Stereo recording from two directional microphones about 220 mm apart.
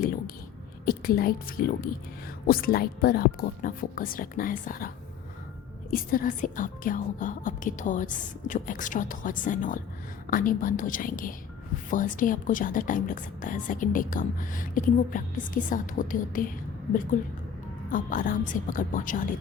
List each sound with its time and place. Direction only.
0.9 s speech: 40° left (ahead or behind)
5.9 s speech: 40° left (ahead or behind)
17.9 s speech: 40° left (ahead or behind)